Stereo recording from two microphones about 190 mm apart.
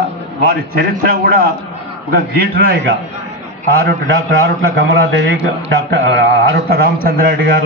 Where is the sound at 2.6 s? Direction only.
55° right (ahead or behind).